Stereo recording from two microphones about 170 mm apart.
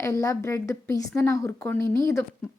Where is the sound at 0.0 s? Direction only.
20° left (ahead or behind).